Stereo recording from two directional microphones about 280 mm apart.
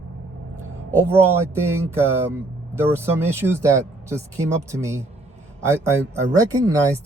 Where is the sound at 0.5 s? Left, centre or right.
Right.